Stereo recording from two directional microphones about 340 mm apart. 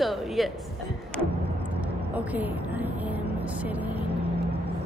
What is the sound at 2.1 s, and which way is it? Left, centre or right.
Vehicle, centre.